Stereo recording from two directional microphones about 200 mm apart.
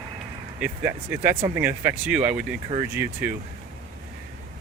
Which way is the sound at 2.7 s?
30° right (ahead or behind).